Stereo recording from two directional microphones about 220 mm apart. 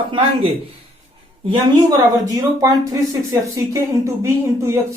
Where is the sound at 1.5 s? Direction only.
20° right (ahead or behind).